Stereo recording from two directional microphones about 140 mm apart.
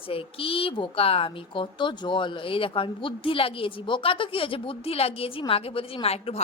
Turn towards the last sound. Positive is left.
turn(degrees=45)  # may be behind; listen again after turning